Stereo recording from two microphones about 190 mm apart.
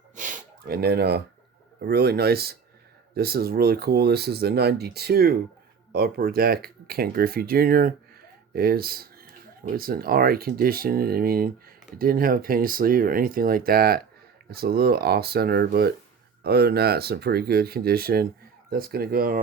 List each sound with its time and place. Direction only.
0.2 s snort: 50° right (ahead or behind)
1.8 s speech: 55° right (ahead or behind)